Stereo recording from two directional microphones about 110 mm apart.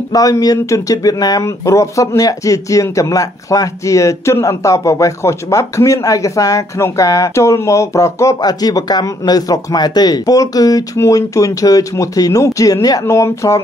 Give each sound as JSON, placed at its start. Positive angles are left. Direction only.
{"t": 0.1, "sound": "speech", "side_deg": 35}